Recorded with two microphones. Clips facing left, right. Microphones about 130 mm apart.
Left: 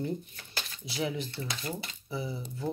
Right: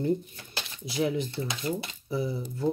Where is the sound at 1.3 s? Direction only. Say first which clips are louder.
Right 6 dB; 25° right (ahead or behind).